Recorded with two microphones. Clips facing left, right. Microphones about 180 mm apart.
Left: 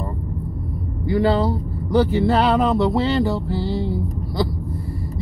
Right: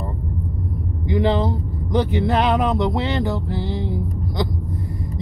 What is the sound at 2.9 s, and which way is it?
Music, 20° right (ahead or behind).